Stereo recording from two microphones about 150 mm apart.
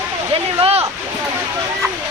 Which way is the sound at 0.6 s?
40° right (ahead or behind).